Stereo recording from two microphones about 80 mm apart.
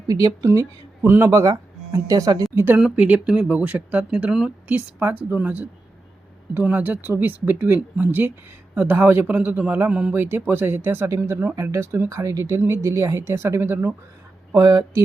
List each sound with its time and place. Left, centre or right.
0.1 s speech: right
2.7 s speech: centre
4.9 s speech: right